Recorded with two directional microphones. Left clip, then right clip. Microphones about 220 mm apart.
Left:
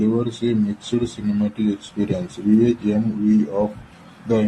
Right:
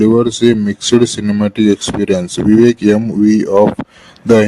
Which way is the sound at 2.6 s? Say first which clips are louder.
Right 12 dB; 55° right (ahead or behind).